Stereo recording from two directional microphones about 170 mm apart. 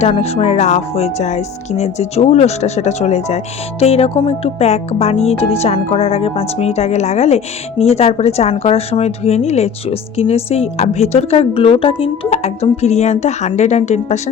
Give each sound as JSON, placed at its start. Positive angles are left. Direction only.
{"t": 0.0, "sound": "speech", "side_deg": 35}